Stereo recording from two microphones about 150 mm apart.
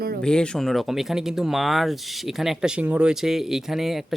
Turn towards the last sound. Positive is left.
turn(degrees=0)  # may be behind; listen again after turning